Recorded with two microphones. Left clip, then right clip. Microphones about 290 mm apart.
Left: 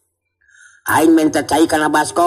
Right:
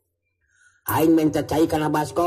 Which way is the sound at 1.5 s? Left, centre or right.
Left.